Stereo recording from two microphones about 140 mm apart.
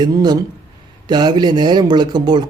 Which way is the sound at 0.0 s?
30° right (ahead or behind).